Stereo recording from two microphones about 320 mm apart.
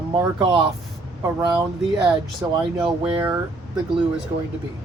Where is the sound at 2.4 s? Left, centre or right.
Centre.